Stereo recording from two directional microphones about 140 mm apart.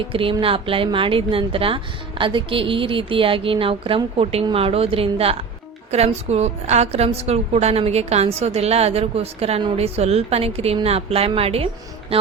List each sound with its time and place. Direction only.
0.1 s a woman's voice: 40° right (ahead or behind)